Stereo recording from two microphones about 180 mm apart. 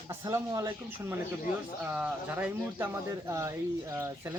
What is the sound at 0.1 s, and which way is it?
Speech, 20° right (ahead or behind).